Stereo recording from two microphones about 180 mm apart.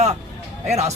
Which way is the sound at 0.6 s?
35° right (ahead or behind).